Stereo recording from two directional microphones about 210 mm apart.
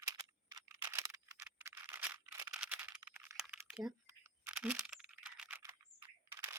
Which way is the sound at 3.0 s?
10° right (ahead or behind).